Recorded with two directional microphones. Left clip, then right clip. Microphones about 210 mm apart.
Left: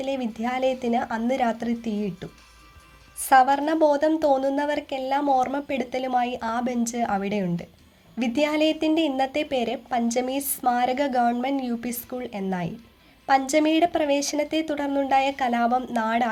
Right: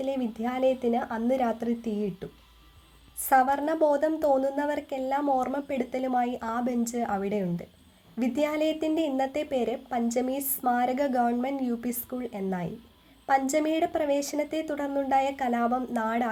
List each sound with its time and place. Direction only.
0.0 s a woman's voice: 40° left (ahead or behind)